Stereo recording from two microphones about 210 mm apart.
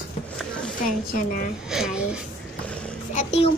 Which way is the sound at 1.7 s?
5° right (ahead or behind).